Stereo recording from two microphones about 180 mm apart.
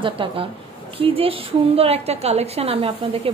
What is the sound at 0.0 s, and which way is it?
A woman's voice, 30° right (ahead or behind).